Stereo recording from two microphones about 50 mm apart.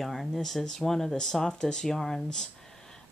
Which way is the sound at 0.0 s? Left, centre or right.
Centre.